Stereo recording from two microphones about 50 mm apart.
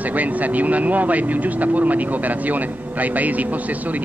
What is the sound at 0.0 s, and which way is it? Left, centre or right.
Speech, right.